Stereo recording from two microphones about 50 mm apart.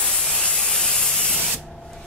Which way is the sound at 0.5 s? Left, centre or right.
Centre.